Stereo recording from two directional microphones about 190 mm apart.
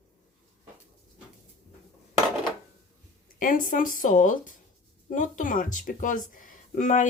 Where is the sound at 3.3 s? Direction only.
45° left (ahead or behind).